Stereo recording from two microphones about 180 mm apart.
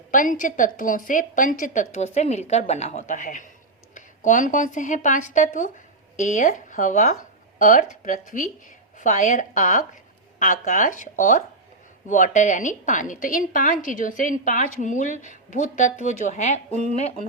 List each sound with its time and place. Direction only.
0.1 s a woman's voice: 45° left (ahead or behind)